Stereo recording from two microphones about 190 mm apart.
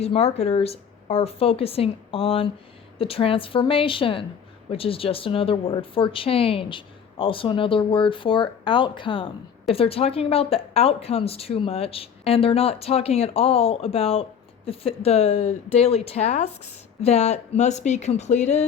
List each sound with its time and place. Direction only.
0.0 s a woman's voice: 30° left (ahead or behind)